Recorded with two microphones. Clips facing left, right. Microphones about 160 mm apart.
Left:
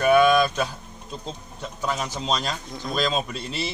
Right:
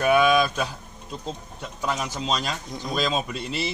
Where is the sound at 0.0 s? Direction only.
5° right (ahead or behind).